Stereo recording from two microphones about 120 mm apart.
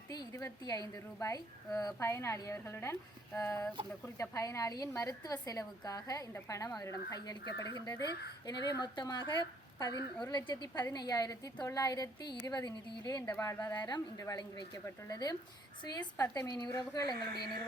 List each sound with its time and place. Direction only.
0.1 s a woman's voice: 30° left (ahead or behind)
7.4 s speech: 40° right (ahead or behind)
8.8 s a woman's voice: 40° left (ahead or behind)